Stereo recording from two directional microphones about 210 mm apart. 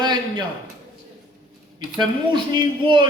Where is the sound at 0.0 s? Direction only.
20° right (ahead or behind).